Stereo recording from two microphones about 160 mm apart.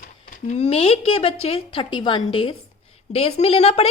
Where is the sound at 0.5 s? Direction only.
40° left (ahead or behind).